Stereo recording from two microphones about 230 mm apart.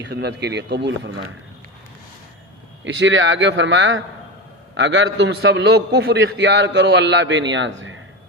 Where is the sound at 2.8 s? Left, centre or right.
Right.